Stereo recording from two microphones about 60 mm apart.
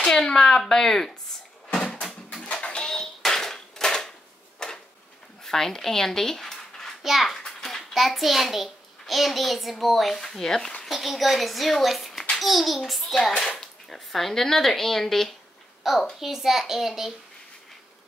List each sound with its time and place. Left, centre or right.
0.0 s speech: centre
1.7 s music: centre
2.4 s a sound: centre
4.6 s drawer open or close: centre
5.4 s a child's voice: centre